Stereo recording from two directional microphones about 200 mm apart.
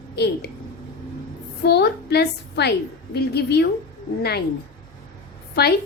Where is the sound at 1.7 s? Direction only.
55° left (ahead or behind).